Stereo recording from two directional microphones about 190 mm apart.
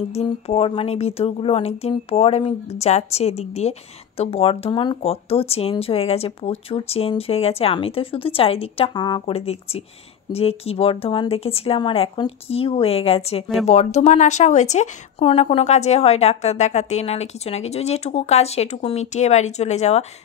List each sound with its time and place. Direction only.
0.1 s speech: 30° left (ahead or behind)